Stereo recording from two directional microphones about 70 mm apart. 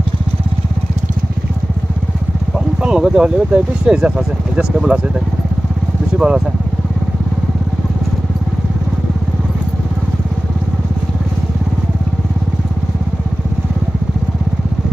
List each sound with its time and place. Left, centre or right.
2.8 s speech: centre
6.1 s speech: centre